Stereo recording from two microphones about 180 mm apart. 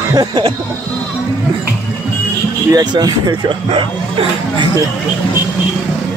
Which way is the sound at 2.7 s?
20° right (ahead or behind).